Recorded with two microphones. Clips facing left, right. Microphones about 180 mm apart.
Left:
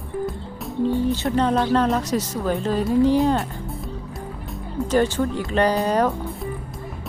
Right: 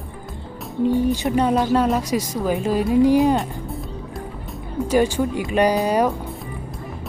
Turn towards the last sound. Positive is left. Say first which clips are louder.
# right 1 dB
turn(degrees=-15)  # may be behind; listen again after turning